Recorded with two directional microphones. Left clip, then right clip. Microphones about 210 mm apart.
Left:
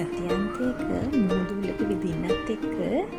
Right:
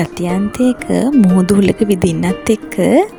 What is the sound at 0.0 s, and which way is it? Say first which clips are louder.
Speech: right 9 dB; 50° right (ahead or behind).